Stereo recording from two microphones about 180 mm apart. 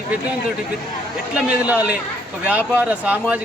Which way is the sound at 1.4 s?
10° right (ahead or behind).